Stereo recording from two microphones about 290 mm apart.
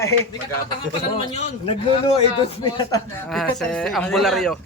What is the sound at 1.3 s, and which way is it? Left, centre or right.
A man's voice, left.